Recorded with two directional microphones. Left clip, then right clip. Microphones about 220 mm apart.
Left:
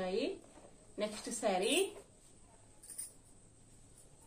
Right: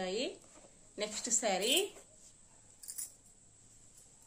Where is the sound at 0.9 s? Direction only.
35° right (ahead or behind).